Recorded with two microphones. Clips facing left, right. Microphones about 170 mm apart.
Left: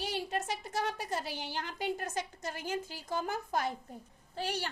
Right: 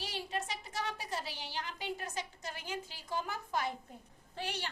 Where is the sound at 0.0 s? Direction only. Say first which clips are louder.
Left 4 dB; 50° left (ahead or behind).